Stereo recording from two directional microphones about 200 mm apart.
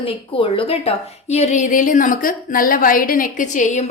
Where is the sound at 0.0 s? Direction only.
25° left (ahead or behind).